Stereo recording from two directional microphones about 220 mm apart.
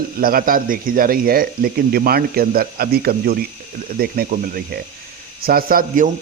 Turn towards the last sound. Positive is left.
turn(degrees=-40)  # may be behind; listen again after turning